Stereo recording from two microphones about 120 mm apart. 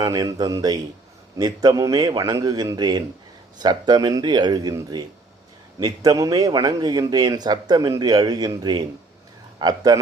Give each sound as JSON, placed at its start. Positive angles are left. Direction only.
{"t": 0.0, "sound": "speech", "side_deg": -35}
{"t": 5.8, "sound": "speech", "side_deg": -30}